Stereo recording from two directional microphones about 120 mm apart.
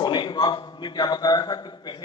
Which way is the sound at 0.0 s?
40° left (ahead or behind).